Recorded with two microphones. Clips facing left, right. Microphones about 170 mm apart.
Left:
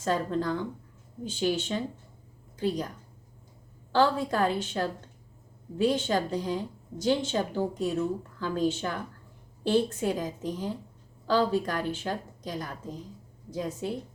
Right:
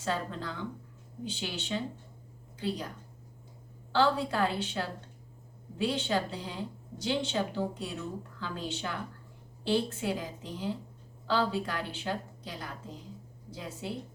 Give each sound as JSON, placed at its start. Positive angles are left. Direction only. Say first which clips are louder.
{"t": 0.0, "sound": "a woman's voice", "louder": "left 6 dB", "side_deg": 45}
{"t": 3.9, "sound": "a woman's voice", "louder": "left 3 dB", "side_deg": 45}